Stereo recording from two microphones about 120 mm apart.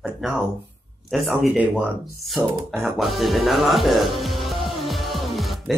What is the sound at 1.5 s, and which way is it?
Speech, 15° right (ahead or behind).